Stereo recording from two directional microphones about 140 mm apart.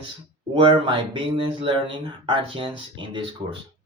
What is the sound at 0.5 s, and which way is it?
Speech, 35° right (ahead or behind).